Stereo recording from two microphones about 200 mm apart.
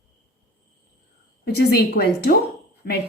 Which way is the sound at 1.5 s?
50° left (ahead or behind).